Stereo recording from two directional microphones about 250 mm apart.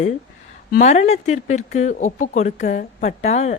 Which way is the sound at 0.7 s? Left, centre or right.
Left.